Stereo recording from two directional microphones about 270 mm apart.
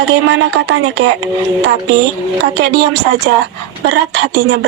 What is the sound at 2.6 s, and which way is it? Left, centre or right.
Speech, right.